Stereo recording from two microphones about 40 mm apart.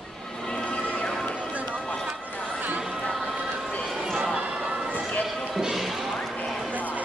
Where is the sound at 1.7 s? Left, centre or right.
Left.